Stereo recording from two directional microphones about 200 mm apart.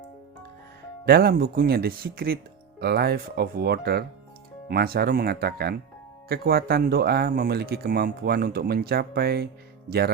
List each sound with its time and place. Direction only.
1.0 s speech: 50° right (ahead or behind)